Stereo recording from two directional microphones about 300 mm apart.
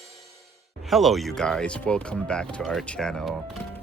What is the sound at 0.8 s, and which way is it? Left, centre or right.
Speech, centre.